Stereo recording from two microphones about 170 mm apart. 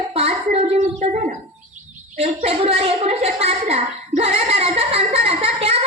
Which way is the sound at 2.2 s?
35° right (ahead or behind).